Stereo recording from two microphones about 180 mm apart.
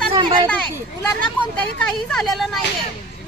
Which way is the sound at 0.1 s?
30° right (ahead or behind).